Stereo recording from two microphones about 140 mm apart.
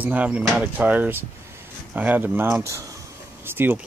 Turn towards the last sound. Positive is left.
turn(degrees=-15)  # may be behind; listen again after turning